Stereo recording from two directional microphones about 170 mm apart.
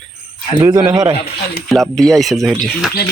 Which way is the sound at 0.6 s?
20° right (ahead or behind).